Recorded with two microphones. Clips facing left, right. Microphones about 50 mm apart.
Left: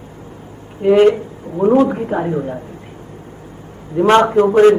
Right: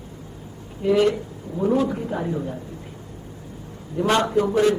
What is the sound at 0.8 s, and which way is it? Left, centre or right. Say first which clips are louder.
A man's voice: left 8 dB; left.